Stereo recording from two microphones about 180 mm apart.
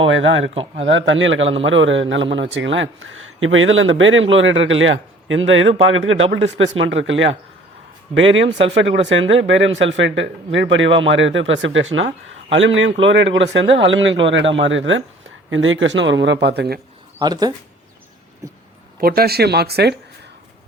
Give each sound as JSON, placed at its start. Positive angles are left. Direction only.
{"t": 0.0, "sound": "speech", "side_deg": -90}
{"t": 17.2, "sound": "speech", "side_deg": -20}
{"t": 18.9, "sound": "speech", "side_deg": -55}